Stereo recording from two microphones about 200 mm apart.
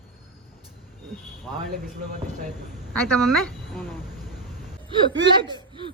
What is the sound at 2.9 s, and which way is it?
A woman's voice, 5° left (ahead or behind).